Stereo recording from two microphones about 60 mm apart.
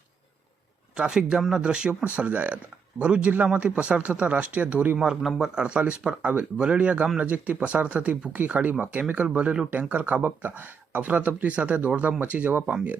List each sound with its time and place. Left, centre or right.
0.9 s speech: centre
5.2 s speech: centre
5.5 s speech: centre